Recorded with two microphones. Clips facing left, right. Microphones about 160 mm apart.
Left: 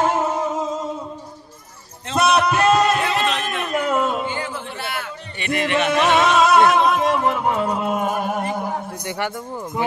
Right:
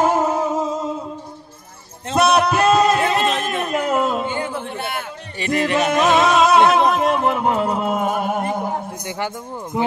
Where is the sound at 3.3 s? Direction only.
45° right (ahead or behind).